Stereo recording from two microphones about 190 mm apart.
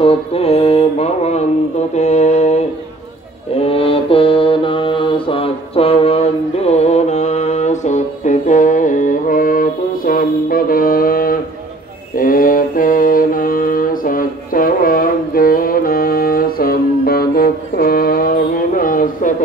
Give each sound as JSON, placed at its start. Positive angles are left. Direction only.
{"t": 0.0, "sound": "mantra", "side_deg": 30}
{"t": 3.7, "sound": "mantra", "side_deg": 30}